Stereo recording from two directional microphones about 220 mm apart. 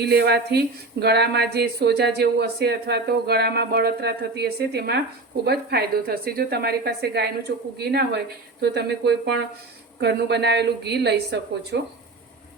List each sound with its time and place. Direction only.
0.0 s speech: 50° right (ahead or behind)